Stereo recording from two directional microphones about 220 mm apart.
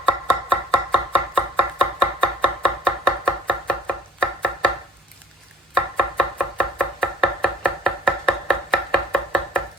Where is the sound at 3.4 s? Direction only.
5° left (ahead or behind).